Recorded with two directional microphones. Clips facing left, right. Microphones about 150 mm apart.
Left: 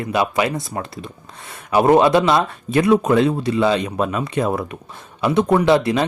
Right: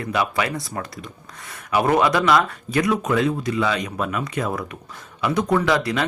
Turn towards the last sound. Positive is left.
turn(degrees=25)  # may be behind; listen again after turning